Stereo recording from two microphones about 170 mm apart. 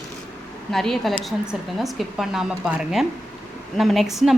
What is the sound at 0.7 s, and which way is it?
Speech, centre (ahead or behind).